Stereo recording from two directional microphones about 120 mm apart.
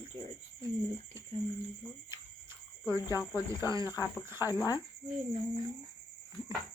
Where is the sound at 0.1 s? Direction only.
40° right (ahead or behind).